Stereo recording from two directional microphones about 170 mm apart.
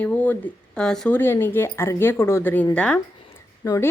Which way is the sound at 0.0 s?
10° left (ahead or behind).